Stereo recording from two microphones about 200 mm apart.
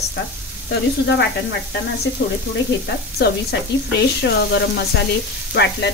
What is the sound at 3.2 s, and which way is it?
Speech, 55° left (ahead or behind).